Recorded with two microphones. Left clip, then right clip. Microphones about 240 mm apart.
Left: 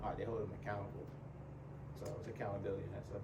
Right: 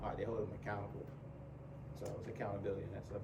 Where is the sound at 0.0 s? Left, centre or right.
Centre.